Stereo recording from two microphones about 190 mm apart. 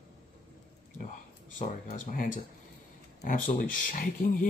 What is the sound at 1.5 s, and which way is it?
Speech, 45° left (ahead or behind).